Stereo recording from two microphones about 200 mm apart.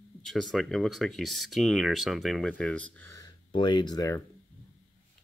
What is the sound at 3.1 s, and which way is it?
Speech, 25° left (ahead or behind).